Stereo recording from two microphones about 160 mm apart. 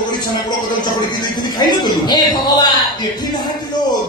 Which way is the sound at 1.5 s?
25° left (ahead or behind).